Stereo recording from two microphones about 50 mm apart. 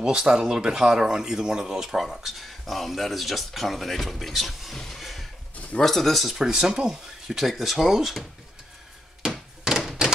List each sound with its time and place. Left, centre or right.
0.0 s speech: centre
4.7 s a sound: centre
5.8 s speech: centre
6.3 s speech: centre
9.2 s thunk: centre